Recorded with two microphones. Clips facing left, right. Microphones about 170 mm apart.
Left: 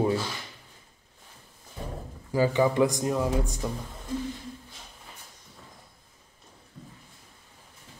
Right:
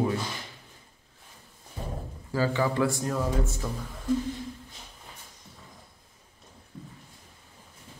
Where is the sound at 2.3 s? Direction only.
15° left (ahead or behind).